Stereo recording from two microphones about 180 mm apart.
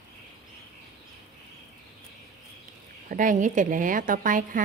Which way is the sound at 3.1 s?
45° right (ahead or behind).